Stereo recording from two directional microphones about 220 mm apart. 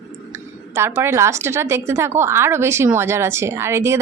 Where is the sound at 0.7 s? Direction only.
10° right (ahead or behind).